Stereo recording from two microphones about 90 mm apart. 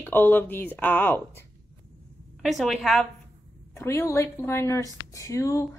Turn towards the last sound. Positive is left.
turn(degrees=35)  # may be behind; listen again after turning